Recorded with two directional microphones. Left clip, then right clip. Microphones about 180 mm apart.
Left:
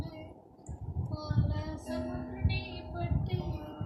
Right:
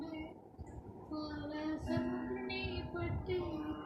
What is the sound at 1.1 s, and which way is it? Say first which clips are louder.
Music: left 2 dB; 20° left (ahead or behind).